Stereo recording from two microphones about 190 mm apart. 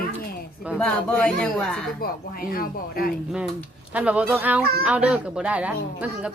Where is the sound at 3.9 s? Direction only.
5° right (ahead or behind).